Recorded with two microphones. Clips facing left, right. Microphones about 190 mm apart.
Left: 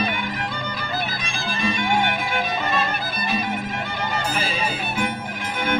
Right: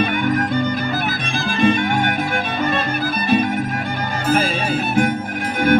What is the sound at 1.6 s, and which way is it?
Music, 45° right (ahead or behind).